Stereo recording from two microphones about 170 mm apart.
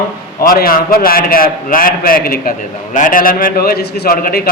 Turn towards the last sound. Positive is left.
turn(degrees=60)  # may be behind; listen again after turning